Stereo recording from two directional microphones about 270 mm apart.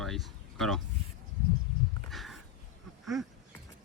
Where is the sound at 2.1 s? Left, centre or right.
Centre.